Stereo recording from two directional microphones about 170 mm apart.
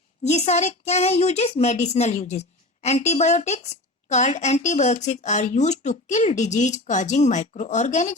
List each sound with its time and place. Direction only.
0.3 s a woman's voice: 40° left (ahead or behind)